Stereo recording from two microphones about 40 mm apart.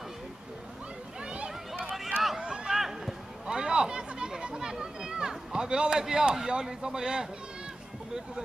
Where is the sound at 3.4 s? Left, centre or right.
Centre.